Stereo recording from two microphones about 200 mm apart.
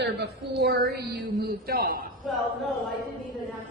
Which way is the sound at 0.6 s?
55° right (ahead or behind).